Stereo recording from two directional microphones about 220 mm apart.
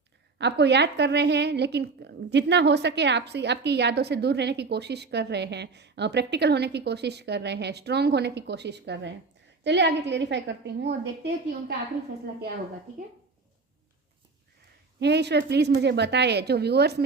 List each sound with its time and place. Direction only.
0.3 s a woman's voice: 50° right (ahead or behind)
14.9 s a woman's voice: 50° right (ahead or behind)